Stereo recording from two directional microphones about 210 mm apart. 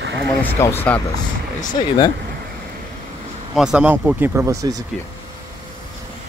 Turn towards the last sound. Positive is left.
turn(degrees=-15)  # may be behind; listen again after turning